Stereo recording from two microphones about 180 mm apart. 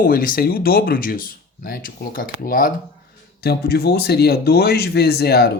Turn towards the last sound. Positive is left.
turn(degrees=60)  # may be behind; listen again after turning